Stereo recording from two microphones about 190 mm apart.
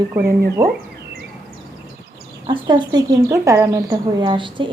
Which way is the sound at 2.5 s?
25° right (ahead or behind).